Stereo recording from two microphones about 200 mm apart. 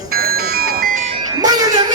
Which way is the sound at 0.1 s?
50° right (ahead or behind).